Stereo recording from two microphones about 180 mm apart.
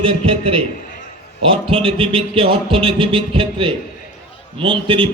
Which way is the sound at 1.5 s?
30° right (ahead or behind).